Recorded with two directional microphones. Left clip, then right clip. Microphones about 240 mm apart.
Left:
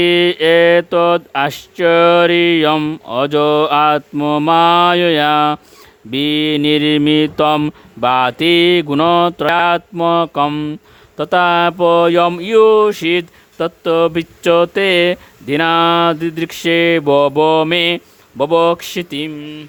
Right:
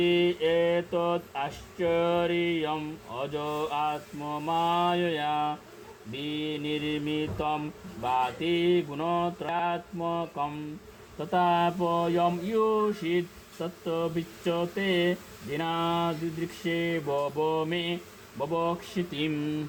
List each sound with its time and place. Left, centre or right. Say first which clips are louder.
0.0 s speech: left 13 dB; left